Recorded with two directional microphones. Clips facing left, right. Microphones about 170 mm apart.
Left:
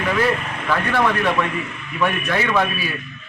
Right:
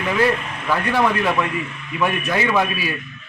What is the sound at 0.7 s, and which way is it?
A man's voice, 10° right (ahead or behind).